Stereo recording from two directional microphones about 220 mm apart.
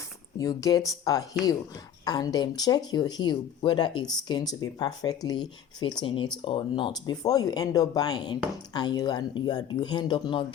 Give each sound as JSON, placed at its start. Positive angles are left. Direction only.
{"t": 0.3, "sound": "speech", "side_deg": 15}